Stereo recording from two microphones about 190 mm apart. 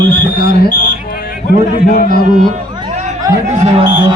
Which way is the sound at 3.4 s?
35° right (ahead or behind).